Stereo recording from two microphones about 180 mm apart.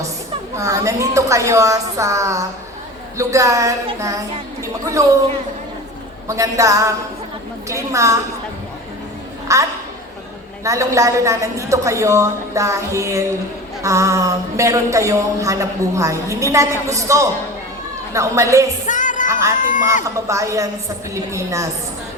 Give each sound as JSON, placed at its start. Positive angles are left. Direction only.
{"t": 0.5, "sound": "speech", "side_deg": -15}
{"t": 6.2, "sound": "speech", "side_deg": -15}
{"t": 9.5, "sound": "speech", "side_deg": -15}
{"t": 18.9, "sound": "music", "side_deg": 45}
{"t": 19.3, "sound": "speech", "side_deg": -15}
{"t": 19.5, "sound": "speech", "side_deg": 45}
{"t": 20.2, "sound": "speech", "side_deg": -15}